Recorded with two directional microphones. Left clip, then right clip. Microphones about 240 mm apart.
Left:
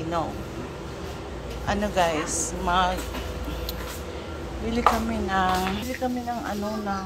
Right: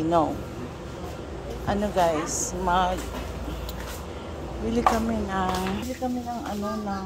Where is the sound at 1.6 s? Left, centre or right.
Centre.